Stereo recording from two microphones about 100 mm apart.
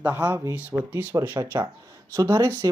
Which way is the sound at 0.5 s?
15° right (ahead or behind).